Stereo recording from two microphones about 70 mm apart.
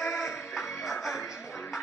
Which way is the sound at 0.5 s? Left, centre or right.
Centre.